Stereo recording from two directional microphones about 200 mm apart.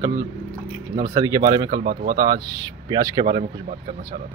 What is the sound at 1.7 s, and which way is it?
Speech, 45° right (ahead or behind).